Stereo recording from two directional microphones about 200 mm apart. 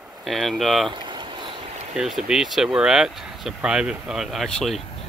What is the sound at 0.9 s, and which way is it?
Vehicle, 25° right (ahead or behind).